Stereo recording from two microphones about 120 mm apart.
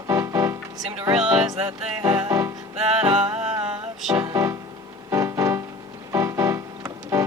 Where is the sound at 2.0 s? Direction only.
30° right (ahead or behind).